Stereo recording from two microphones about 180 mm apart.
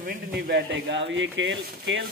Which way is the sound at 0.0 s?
55° right (ahead or behind).